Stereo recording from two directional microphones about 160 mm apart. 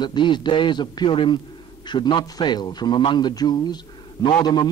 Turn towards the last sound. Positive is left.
turn(degrees=25)  # may be behind; listen again after turning